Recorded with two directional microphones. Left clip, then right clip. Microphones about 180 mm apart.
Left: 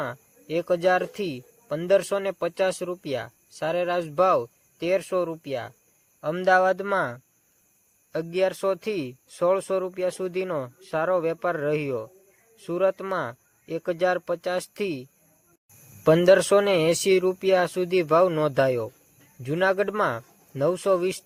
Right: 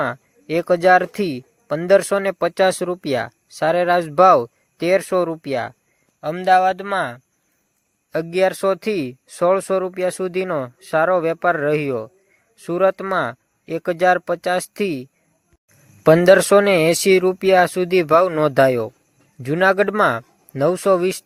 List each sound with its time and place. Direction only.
0.0 s speech: 35° right (ahead or behind)
6.3 s speech: centre (ahead or behind)
8.1 s speech: 25° right (ahead or behind)
16.0 s speech: 30° right (ahead or behind)